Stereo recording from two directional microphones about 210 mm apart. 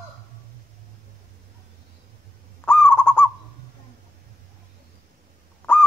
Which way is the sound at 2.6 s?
10° left (ahead or behind).